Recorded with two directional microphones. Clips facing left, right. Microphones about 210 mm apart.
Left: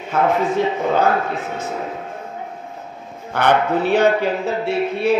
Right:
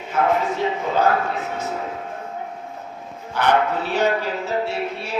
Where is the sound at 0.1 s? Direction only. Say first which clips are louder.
Left 3 dB; 55° left (ahead or behind).